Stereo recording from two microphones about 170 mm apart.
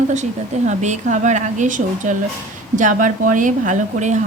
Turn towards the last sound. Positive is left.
turn(degrees=-45)  # may be behind; listen again after turning